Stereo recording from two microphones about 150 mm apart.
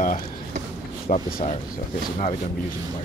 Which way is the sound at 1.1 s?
50° left (ahead or behind).